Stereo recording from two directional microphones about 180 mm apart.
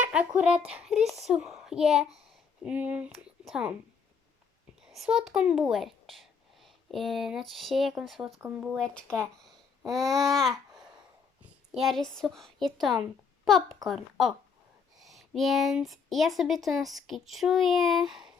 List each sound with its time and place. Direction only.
0.0 s speech: 5° right (ahead or behind)
4.9 s speech: centre (ahead or behind)
8.7 s a child's voice: 5° left (ahead or behind)